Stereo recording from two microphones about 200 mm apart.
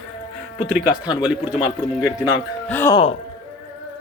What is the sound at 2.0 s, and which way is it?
Speech, 15° left (ahead or behind).